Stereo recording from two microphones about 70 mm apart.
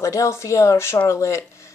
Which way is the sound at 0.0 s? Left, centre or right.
Left.